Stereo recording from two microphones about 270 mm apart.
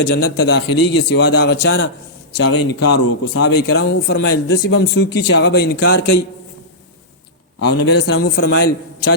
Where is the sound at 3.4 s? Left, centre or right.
Left.